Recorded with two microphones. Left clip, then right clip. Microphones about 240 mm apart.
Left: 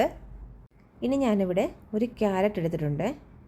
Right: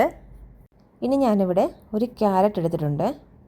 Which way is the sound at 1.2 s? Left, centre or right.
Centre.